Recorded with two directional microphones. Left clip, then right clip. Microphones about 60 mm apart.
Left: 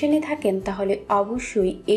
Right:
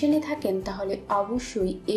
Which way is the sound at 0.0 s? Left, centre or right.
Centre.